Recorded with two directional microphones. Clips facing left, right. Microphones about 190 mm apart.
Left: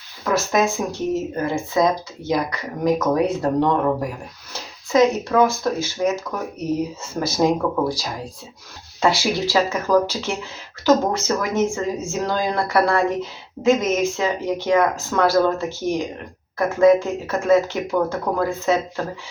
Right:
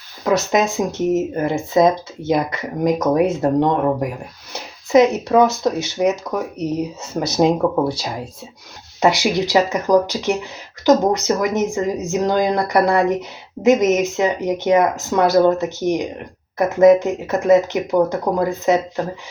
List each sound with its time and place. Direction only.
0.3 s speech: 20° right (ahead or behind)
7.3 s speech: 25° right (ahead or behind)